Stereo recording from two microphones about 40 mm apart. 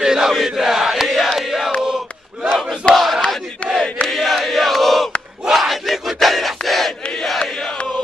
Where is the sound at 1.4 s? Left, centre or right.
Centre.